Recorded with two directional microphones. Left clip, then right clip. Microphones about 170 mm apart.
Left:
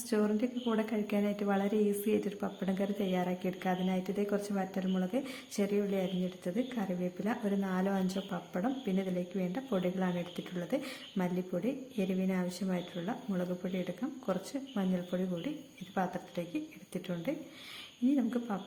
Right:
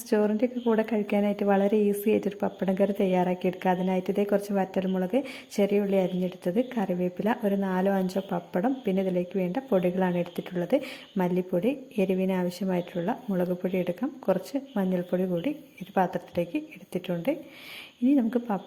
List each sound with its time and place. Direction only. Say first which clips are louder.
0.1 s a woman's voice: right 8 dB; 25° right (ahead or behind)